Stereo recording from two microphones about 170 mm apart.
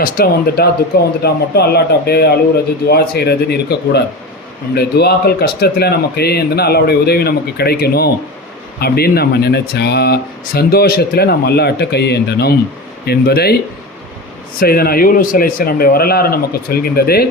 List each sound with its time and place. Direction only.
0.0 s speech: 65° left (ahead or behind)
14.6 s speech: 60° left (ahead or behind)